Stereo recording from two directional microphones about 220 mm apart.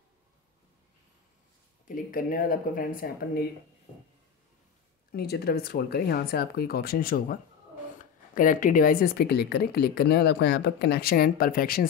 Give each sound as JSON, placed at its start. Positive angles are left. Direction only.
{"t": 1.9, "sound": "speech", "side_deg": 40}
{"t": 5.1, "sound": "speech", "side_deg": 45}